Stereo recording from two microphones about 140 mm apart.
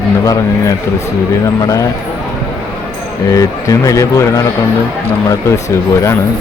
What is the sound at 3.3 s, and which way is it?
Speech, 25° left (ahead or behind).